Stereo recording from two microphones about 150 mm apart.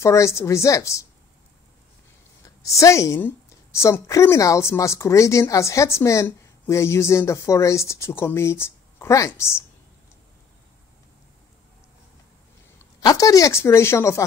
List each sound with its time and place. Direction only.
0.0 s a woman's voice: 20° left (ahead or behind)
2.4 s a woman's voice: 20° left (ahead or behind)
13.0 s a woman's voice: 25° left (ahead or behind)